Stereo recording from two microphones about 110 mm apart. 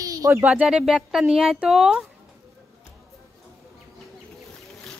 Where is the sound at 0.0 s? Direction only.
30° right (ahead or behind).